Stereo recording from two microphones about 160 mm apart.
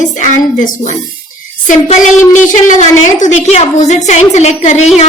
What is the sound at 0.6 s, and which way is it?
A woman's voice, 55° left (ahead or behind).